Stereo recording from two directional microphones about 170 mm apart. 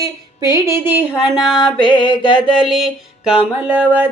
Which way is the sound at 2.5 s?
Centre (ahead or behind).